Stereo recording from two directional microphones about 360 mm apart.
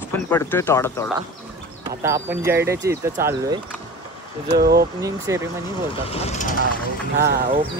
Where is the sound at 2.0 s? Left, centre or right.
Centre.